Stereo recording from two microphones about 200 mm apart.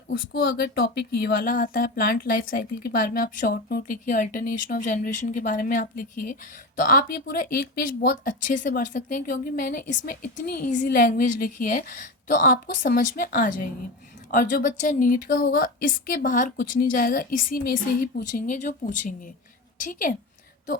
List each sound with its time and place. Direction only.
0.1 s a woman's voice: 60° left (ahead or behind); by 20.1 s 40° left (ahead or behind)